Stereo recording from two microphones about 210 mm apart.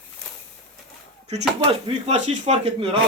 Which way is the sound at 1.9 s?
30° right (ahead or behind).